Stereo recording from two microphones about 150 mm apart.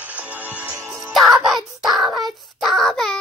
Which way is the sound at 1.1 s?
Centre (ahead or behind).